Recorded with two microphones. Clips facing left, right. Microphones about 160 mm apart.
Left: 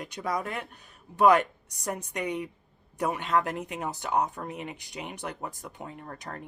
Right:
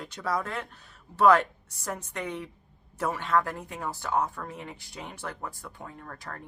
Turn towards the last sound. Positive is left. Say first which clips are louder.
# left 2 dB
turn(degrees=20)  # may be behind; listen again after turning